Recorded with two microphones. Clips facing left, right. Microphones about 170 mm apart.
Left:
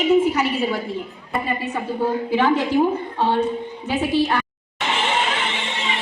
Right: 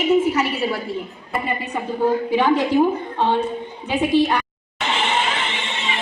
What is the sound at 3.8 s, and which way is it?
Speech, 15° right (ahead or behind).